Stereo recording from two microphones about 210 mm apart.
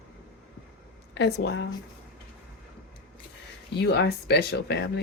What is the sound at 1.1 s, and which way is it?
Speech, 55° left (ahead or behind).